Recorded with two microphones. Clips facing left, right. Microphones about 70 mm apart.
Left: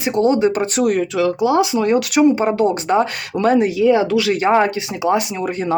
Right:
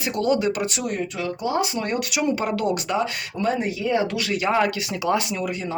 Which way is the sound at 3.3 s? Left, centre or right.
Left.